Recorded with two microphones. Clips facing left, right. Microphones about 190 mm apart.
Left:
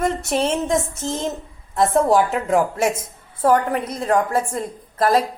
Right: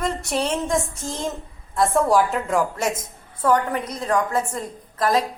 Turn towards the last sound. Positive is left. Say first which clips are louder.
# left 3 dB
turn(degrees=30)  # may be behind; listen again after turning